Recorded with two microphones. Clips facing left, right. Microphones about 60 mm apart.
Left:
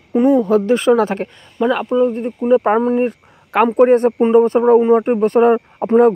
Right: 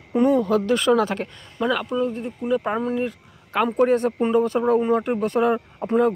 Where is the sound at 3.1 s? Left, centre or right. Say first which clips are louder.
Left 8 dB; left.